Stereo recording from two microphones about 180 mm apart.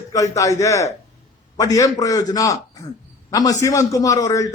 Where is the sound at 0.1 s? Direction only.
20° left (ahead or behind).